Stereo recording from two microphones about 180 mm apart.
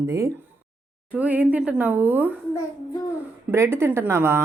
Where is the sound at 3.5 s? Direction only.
15° right (ahead or behind).